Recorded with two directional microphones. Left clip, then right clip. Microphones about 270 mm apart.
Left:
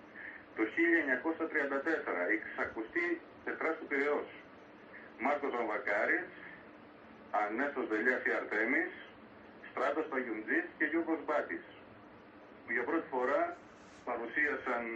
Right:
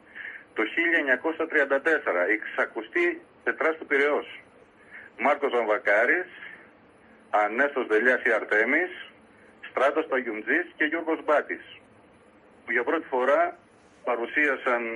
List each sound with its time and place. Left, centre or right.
0.6 s speech: right
5.2 s speech: right
7.2 s speech: right
9.8 s speech: right
12.6 s speech: right